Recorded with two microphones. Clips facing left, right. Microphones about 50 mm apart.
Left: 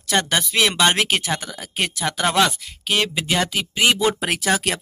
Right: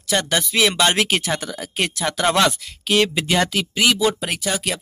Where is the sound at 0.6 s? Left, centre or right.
Centre.